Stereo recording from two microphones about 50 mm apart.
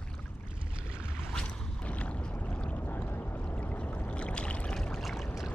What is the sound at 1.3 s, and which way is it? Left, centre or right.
Boat, left.